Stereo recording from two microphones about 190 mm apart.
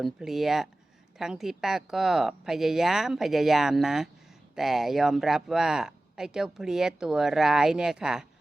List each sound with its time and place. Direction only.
0.0 s speech: centre (ahead or behind)